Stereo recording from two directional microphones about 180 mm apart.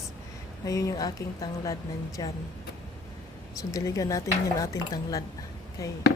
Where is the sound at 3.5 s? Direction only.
20° left (ahead or behind).